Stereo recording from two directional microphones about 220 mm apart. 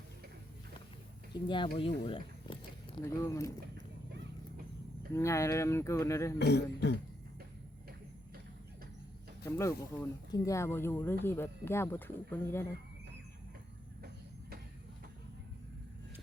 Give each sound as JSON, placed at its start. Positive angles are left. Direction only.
{"t": 1.3, "sound": "speech", "side_deg": 20}
{"t": 5.1, "sound": "speech", "side_deg": 15}
{"t": 6.4, "sound": "throat clearing", "side_deg": 50}
{"t": 9.4, "sound": "speech", "side_deg": 15}